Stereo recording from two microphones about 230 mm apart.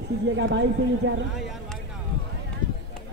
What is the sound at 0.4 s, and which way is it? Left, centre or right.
Speech, right.